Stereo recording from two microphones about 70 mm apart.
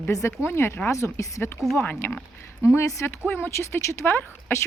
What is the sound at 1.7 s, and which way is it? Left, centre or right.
Speech, left.